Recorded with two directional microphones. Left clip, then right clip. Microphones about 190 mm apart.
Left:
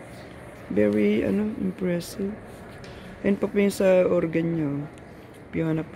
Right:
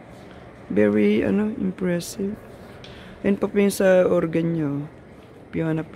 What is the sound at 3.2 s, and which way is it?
Speech, 15° right (ahead or behind).